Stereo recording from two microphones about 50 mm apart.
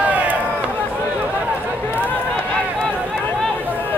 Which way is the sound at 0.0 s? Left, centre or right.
Right.